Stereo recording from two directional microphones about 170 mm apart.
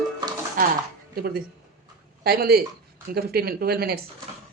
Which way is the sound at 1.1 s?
65° right (ahead or behind).